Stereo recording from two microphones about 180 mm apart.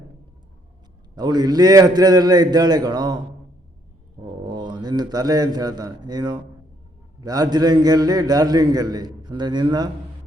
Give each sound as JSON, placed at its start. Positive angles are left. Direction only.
{"t": 1.1, "sound": "a man's voice", "side_deg": -25}
{"t": 4.4, "sound": "a man's voice", "side_deg": -25}